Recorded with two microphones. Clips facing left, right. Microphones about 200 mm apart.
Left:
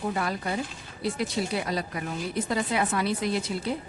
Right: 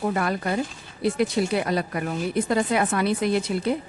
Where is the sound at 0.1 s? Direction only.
60° right (ahead or behind).